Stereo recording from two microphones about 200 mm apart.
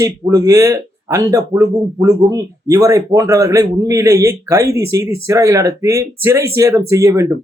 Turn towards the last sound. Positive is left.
turn(degrees=-15)  # may be behind; listen again after turning